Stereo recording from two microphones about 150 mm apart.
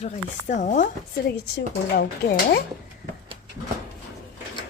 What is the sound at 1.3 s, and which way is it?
Speech, 90° left.